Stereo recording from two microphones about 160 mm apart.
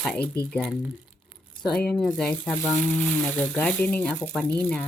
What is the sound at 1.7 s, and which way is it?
Speech, 5° left (ahead or behind).